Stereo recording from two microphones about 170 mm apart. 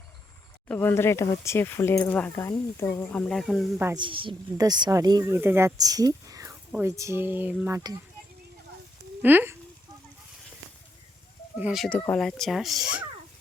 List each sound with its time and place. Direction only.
0.7 s speech: 15° left (ahead or behind)
3.9 s speech: 30° right (ahead or behind); by 7.8 s 10° right (ahead or behind)
9.2 s speech: 10° right (ahead or behind)
11.6 s speech: centre (ahead or behind)